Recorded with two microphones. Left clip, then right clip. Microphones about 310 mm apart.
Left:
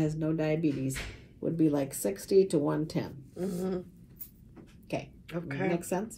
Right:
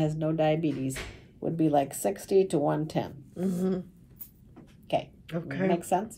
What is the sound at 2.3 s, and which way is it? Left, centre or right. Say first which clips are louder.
A woman's voice: even; centre.